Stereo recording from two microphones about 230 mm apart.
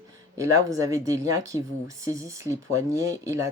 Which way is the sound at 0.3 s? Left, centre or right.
Centre.